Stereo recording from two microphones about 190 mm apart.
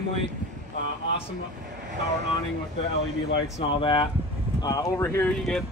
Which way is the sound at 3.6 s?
25° left (ahead or behind).